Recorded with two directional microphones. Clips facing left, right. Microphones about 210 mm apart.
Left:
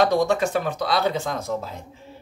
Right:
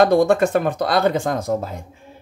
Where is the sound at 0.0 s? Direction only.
55° right (ahead or behind).